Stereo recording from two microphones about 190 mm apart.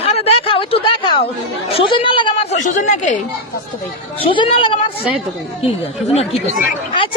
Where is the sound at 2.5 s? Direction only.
40° left (ahead or behind).